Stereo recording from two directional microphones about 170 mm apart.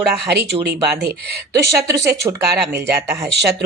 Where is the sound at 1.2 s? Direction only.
75° right (ahead or behind).